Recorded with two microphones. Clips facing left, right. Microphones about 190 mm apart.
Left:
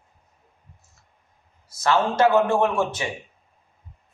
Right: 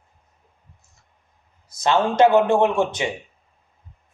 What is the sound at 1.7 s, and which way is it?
A man's voice, 20° right (ahead or behind).